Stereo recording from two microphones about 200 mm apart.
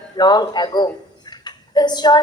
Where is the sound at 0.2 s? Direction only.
20° left (ahead or behind).